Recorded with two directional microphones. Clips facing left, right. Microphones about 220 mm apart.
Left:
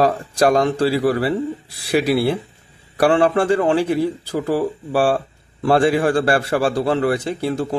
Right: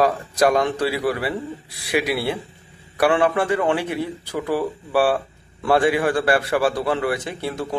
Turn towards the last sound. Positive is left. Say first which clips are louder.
# left 5 dB
turn(degrees=35)  # may be behind; listen again after turning